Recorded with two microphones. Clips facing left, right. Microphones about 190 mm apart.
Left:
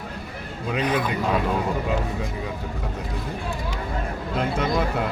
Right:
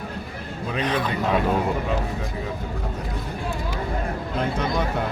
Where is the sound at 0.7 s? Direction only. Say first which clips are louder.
Left 1 dB; 10° left (ahead or behind).